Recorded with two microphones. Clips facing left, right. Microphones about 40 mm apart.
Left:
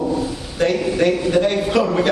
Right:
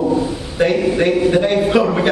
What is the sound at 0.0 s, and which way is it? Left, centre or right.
A man's voice, centre.